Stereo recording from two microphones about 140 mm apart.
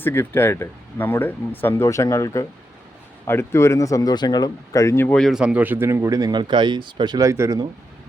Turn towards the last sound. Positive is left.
turn(degrees=-20)  # may be behind; listen again after turning